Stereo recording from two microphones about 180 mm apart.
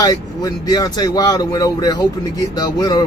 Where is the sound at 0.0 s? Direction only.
20° left (ahead or behind).